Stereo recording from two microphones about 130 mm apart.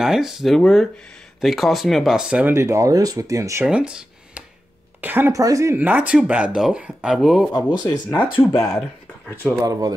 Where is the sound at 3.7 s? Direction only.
5° right (ahead or behind).